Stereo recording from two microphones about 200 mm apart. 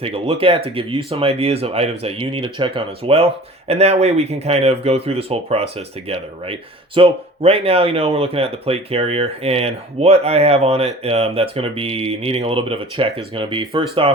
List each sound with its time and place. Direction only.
0.0 s speech: 30° right (ahead or behind)